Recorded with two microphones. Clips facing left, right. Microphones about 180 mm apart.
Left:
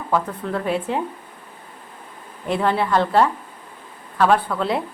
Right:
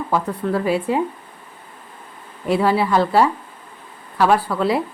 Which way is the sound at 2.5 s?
5° right (ahead or behind).